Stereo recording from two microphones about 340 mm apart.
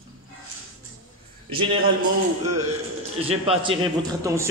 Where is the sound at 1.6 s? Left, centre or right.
Centre.